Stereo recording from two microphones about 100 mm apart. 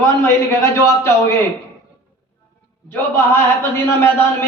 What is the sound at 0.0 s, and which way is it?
A man's voice, 25° left (ahead or behind).